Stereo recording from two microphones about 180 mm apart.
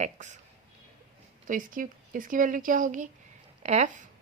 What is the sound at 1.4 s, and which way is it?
Speech, 45° right (ahead or behind).